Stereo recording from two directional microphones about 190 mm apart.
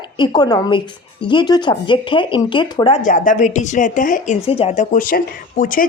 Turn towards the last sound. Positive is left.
turn(degrees=45)  # may be behind; listen again after turning